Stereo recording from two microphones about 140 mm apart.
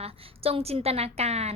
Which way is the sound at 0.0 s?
45° right (ahead or behind).